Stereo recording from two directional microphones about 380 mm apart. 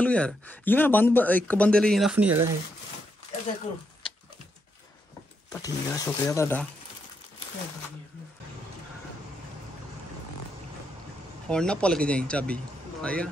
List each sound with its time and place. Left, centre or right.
0.0 s speech: centre
4.0 s a sound: centre
5.5 s speech: centre
11.4 s speech: centre